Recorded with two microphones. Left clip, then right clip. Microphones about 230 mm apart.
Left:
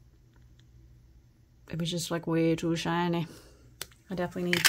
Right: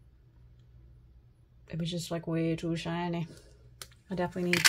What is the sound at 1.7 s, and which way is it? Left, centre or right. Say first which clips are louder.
Speech: left 3 dB; left.